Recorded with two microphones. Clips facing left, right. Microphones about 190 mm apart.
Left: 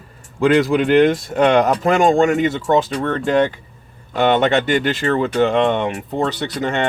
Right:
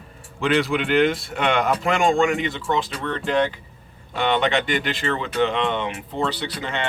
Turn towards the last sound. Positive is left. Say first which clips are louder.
# left 7 dB
turn(degrees=45)  # may be behind; listen again after turning